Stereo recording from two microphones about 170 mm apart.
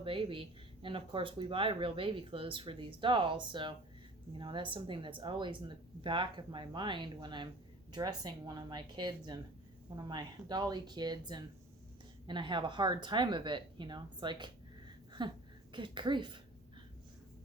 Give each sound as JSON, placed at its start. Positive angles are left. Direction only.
{"t": 0.0, "sound": "speech", "side_deg": -30}